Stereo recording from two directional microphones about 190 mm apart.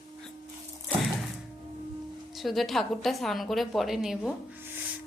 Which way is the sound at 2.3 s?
Centre (ahead or behind).